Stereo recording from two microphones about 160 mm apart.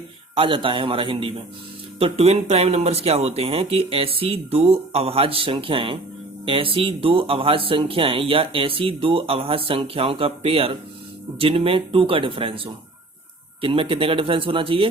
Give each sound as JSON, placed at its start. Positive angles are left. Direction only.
{"t": 0.3, "sound": "speech", "side_deg": -35}